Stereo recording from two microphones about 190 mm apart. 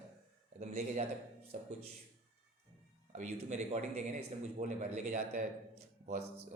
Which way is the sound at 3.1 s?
35° right (ahead or behind).